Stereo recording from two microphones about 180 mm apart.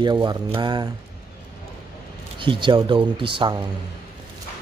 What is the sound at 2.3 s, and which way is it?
Speech, 30° right (ahead or behind).